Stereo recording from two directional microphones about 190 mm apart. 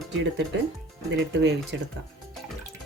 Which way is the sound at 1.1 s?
70° right (ahead or behind).